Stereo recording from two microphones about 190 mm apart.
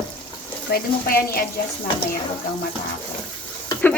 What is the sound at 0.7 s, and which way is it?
Speech, 55° left (ahead or behind).